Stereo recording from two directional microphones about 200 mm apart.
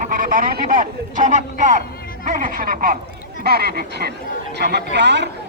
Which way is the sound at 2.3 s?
45° right (ahead or behind).